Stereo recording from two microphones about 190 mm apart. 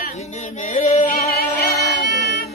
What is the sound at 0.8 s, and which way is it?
Female singing, 40° left (ahead or behind).